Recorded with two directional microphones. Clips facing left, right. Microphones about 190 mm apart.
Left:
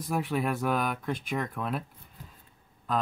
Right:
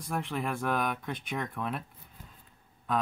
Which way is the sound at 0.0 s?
5° left (ahead or behind).